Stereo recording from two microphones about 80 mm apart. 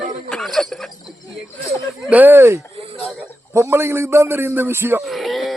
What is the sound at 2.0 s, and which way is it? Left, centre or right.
A man's voice, right.